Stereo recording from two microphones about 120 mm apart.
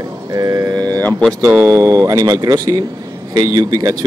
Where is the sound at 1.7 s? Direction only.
25° right (ahead or behind).